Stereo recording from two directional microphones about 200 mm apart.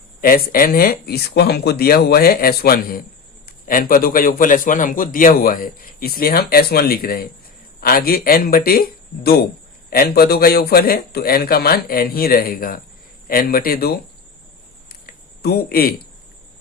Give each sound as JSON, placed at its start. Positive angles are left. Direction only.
{"t": 0.2, "sound": "a man's voice", "side_deg": 45}
{"t": 15.4, "sound": "a man's voice", "side_deg": 50}